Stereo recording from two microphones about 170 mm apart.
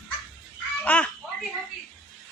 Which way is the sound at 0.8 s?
10° left (ahead or behind).